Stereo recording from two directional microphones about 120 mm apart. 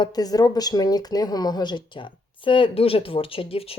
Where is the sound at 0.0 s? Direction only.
35° left (ahead or behind).